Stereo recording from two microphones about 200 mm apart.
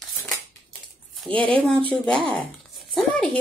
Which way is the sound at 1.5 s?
10° left (ahead or behind).